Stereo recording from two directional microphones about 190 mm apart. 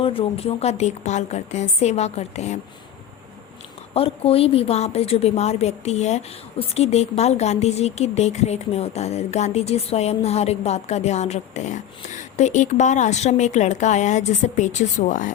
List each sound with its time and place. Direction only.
0.0 s a woman's voice: 30° left (ahead or behind)
3.9 s a woman's voice: 30° left (ahead or behind)